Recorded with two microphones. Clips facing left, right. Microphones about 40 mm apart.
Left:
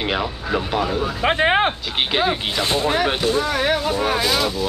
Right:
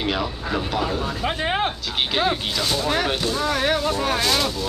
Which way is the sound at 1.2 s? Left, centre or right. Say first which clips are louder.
Left 7 dB; left.